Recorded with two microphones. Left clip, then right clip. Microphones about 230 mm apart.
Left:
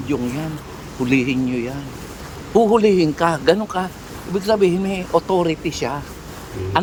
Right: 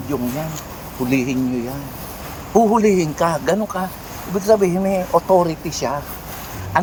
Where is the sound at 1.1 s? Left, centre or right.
Centre.